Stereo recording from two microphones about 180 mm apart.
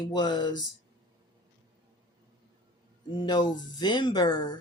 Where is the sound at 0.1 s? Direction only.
25° left (ahead or behind).